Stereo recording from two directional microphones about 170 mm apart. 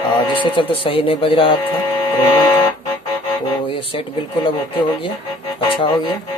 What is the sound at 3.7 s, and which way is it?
Speech, 30° left (ahead or behind).